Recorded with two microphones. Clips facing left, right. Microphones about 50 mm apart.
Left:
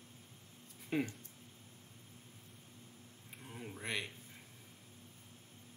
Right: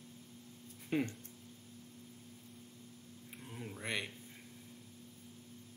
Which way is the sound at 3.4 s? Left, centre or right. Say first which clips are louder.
Right 1 dB; centre.